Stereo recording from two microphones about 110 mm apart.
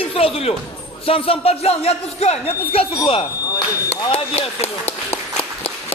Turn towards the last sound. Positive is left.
turn(degrees=70)  # may be behind; listen again after turning